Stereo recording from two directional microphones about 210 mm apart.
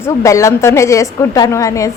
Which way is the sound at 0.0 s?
15° left (ahead or behind).